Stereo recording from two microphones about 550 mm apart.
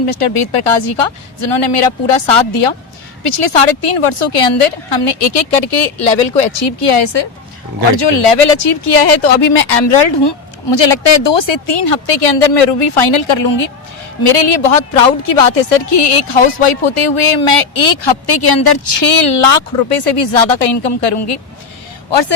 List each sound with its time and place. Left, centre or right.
0.0 s a woman's voice: left
6.6 s speech: left
8.3 s speech: left
9.6 s speech: left
14.3 s a woman's voice: left